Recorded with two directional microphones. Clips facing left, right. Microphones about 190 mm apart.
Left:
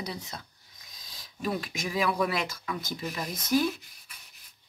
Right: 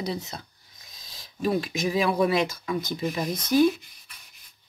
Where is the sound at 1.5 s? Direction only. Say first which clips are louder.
Right 7 dB; 30° right (ahead or behind).